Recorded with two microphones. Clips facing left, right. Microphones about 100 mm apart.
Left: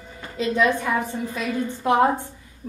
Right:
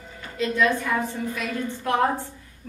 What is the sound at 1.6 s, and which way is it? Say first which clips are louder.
Speech: left 4 dB; 20° left (ahead or behind).